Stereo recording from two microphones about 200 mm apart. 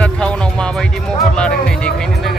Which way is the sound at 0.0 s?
5° left (ahead or behind).